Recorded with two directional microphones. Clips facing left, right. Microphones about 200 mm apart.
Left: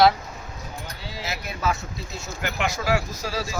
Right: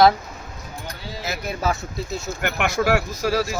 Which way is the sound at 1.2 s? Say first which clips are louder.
Right 3 dB; 40° right (ahead or behind).